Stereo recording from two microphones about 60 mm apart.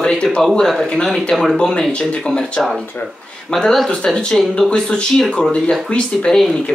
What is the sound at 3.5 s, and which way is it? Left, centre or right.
Speech, centre.